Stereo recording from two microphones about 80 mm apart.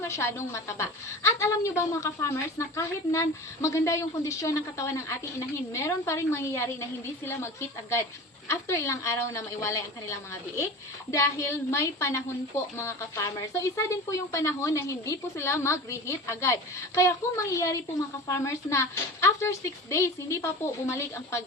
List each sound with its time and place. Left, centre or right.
0.0 s a woman's voice: left